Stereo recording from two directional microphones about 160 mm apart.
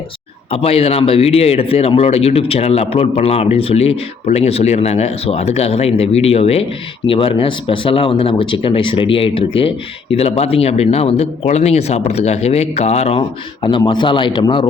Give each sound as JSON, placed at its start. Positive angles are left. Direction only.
{"t": 0.5, "sound": "speech", "side_deg": 40}